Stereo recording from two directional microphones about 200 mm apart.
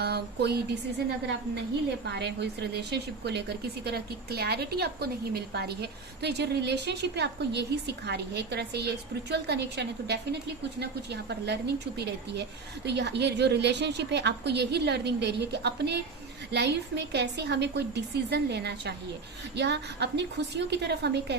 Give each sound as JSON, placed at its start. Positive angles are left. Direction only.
{"t": 0.0, "sound": "a woman's voice", "side_deg": -55}